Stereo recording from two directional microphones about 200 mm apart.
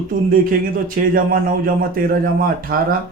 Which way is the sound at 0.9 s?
45° right (ahead or behind).